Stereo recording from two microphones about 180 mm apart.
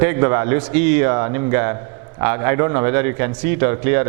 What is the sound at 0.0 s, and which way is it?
A man's voice, 15° right (ahead or behind).